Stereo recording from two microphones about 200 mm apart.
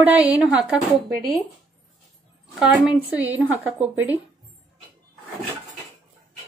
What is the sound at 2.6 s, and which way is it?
Speech, 5° right (ahead or behind).